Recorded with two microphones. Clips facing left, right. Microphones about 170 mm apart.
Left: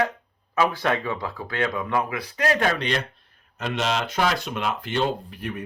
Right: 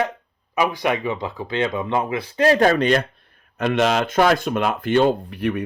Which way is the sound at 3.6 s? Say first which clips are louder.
Right 7 dB; 60° right (ahead or behind).